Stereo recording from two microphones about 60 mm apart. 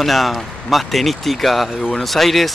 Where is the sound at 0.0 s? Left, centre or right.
Centre.